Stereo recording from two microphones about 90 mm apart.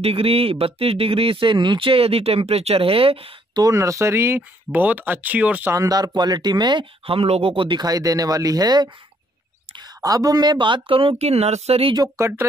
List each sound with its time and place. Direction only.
0.1 s speech: 90° right
3.7 s speech: 35° right (ahead or behind); by 5.7 s 15° right (ahead or behind)
5.7 s speech: 40° right (ahead or behind); by 7.8 s 70° right (ahead or behind)
7.8 s speech: 45° right (ahead or behind); by 11.1 s 80° right
11.7 s speech: 90° right
12.2 s speech: 25° right (ahead or behind)